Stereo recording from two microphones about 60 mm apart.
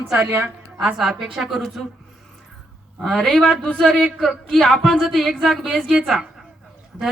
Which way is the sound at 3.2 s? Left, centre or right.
Centre.